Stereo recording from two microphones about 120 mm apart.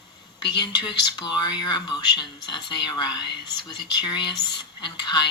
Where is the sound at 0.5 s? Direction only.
35° left (ahead or behind).